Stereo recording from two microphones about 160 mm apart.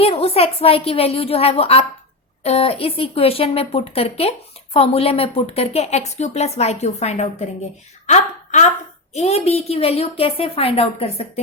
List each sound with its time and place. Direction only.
0.0 s a woman's voice: 40° left (ahead or behind)